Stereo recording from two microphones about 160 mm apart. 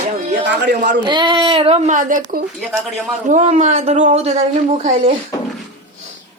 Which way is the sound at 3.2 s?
45° right (ahead or behind).